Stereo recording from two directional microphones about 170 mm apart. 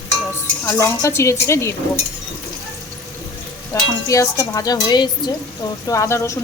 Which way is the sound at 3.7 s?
20° left (ahead or behind).